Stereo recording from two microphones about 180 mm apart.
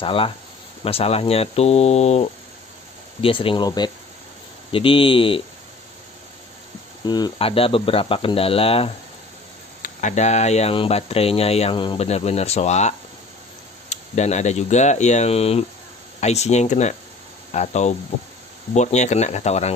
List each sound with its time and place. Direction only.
0.0 s speech: 30° left (ahead or behind)
7.1 s speech: 25° left (ahead or behind)
9.8 s speech: 45° left (ahead or behind)